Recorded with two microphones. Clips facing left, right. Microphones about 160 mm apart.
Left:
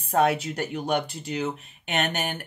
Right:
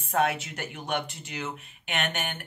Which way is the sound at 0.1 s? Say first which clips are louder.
Left 4 dB; 35° left (ahead or behind).